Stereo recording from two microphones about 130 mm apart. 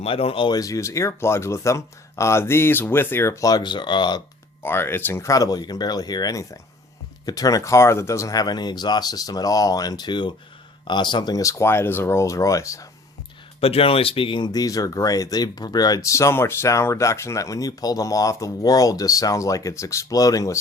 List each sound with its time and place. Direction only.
0.0 s speech: 45° left (ahead or behind)
0.5 s speech: 25° left (ahead or behind)
4.6 s speech: 15° left (ahead or behind)
13.6 s speech: 50° left (ahead or behind); by 20.6 s 25° left (ahead or behind)